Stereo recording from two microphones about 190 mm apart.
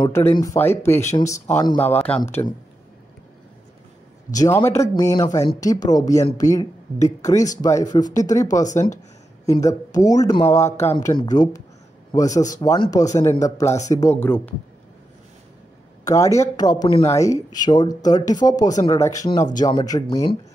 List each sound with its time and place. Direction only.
0.0 s speech: 15° left (ahead or behind)
4.3 s speech: 20° left (ahead or behind)
16.0 s speech: 15° left (ahead or behind)